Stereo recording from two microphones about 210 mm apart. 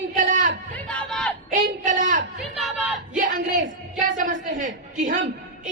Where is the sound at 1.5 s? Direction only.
40° right (ahead or behind).